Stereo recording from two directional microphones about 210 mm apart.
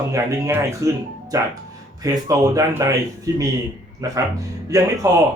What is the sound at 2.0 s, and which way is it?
Speech, 15° right (ahead or behind).